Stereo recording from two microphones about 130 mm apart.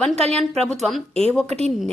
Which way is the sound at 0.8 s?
5° left (ahead or behind).